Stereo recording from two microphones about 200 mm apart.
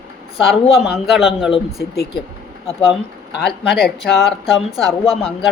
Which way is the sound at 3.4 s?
55° left (ahead or behind).